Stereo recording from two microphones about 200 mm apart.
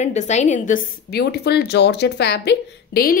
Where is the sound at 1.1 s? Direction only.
55° left (ahead or behind).